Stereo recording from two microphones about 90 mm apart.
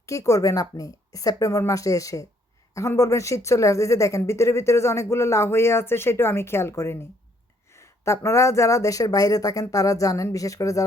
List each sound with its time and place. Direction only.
0.0 s speech: 35° left (ahead or behind)